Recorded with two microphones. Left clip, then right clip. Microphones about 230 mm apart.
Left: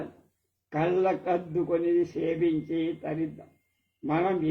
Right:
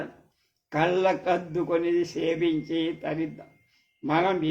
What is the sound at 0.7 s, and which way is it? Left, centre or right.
A man's voice, right.